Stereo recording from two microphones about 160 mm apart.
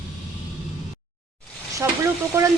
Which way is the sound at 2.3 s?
20° right (ahead or behind).